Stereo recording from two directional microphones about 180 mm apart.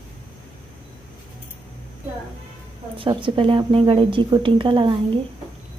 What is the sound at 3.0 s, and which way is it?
A woman's voice, 30° right (ahead or behind).